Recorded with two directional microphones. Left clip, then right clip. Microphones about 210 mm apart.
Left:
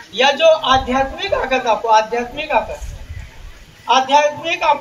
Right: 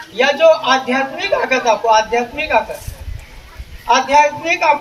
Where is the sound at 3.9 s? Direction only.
15° right (ahead or behind).